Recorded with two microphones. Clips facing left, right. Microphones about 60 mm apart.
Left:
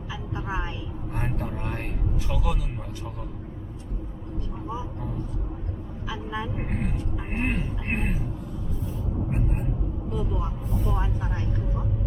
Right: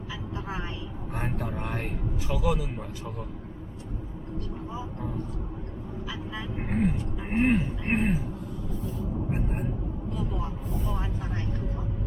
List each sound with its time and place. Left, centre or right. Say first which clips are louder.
1.1 s vehicle: even; centre
2.3 s speech: right 5 dB; centre
6.1 s speech: left 7 dB; centre
10.2 s speech: left 3 dB; left